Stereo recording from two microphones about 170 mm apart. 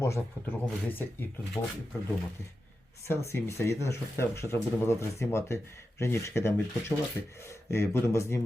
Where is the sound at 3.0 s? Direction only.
15° left (ahead or behind).